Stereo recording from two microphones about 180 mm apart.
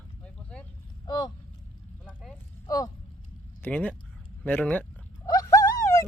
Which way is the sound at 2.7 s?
20° left (ahead or behind).